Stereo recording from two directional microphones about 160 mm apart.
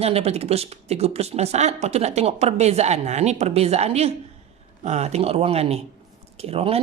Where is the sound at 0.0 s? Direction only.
40° right (ahead or behind).